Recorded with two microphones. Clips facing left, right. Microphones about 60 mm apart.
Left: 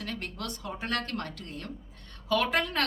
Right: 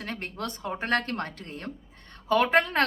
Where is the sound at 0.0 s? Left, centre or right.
Right.